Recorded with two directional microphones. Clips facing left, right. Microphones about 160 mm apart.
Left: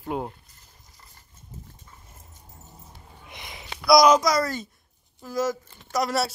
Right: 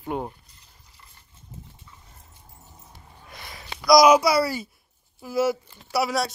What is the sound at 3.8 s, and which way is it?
A child's voice, centre (ahead or behind).